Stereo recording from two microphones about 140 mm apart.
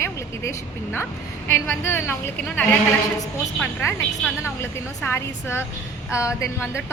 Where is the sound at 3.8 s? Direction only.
20° left (ahead or behind).